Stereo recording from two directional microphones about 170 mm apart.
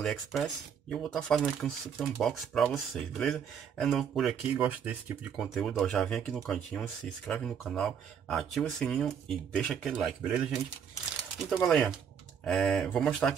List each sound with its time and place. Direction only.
0.0 s speech: centre (ahead or behind)